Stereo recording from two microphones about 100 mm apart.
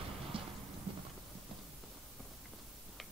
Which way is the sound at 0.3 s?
65° right (ahead or behind).